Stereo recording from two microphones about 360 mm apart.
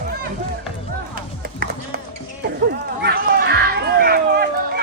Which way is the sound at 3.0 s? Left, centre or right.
Right.